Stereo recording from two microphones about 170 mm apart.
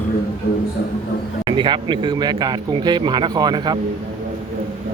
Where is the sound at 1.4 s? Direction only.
30° right (ahead or behind).